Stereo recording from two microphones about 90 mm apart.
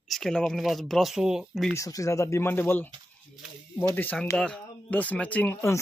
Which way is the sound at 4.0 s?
20° left (ahead or behind).